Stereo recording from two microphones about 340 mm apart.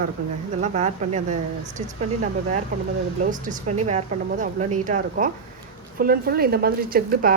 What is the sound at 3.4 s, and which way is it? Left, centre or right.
Speech, centre.